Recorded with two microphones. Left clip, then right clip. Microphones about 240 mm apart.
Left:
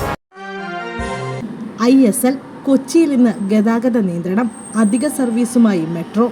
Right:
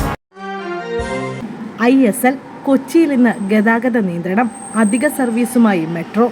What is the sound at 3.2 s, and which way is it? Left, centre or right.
Speech, centre.